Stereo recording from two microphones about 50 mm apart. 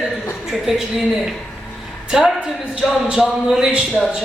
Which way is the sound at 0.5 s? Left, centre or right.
Centre.